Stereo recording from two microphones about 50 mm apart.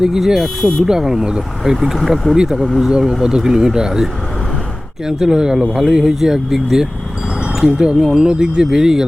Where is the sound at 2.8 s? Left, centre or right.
Centre.